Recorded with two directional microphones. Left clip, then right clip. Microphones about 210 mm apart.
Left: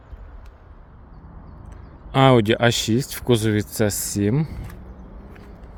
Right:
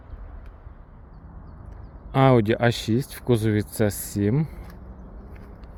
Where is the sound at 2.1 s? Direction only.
5° left (ahead or behind).